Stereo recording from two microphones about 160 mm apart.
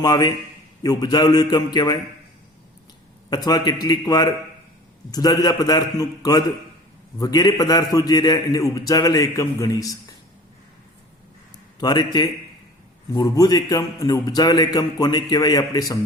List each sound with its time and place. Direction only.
0.0 s a man's voice: 25° left (ahead or behind)
3.2 s a man's voice: 25° left (ahead or behind)
11.8 s a man's voice: 25° left (ahead or behind)